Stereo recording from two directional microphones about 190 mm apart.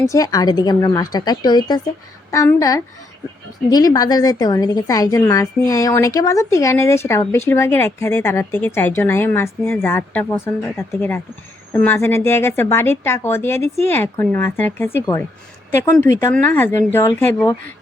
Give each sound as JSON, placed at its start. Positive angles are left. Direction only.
{"t": 0.0, "sound": "a woman's voice", "side_deg": 15}